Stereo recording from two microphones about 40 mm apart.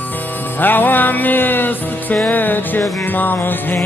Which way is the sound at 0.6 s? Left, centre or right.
Left.